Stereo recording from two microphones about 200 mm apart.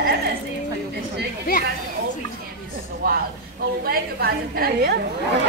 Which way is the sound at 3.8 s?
50° right (ahead or behind).